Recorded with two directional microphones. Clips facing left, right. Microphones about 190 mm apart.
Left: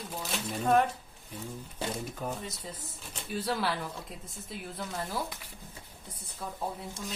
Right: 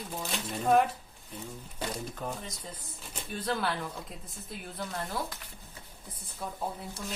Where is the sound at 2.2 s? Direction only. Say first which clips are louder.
Left 1 dB; 5° left (ahead or behind).